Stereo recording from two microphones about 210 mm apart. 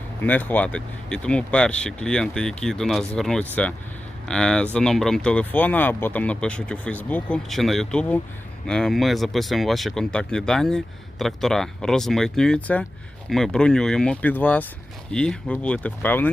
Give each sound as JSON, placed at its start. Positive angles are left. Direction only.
{"t": 0.2, "sound": "speech", "side_deg": 10}